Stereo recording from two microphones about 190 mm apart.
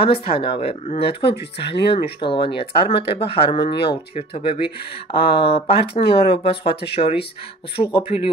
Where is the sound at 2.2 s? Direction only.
25° left (ahead or behind).